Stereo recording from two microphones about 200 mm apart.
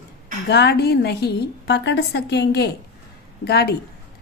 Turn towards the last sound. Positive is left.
turn(degrees=55)  # may be behind; listen again after turning